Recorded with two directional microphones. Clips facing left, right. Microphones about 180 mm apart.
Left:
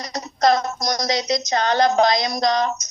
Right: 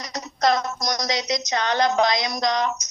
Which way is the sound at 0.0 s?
30° left (ahead or behind).